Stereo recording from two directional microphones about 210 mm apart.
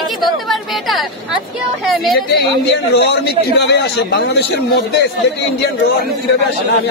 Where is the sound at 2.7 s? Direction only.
50° left (ahead or behind).